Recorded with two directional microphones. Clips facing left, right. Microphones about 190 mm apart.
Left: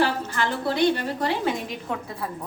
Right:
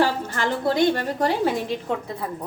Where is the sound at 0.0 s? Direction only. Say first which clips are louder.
Right 2 dB; 45° right (ahead or behind).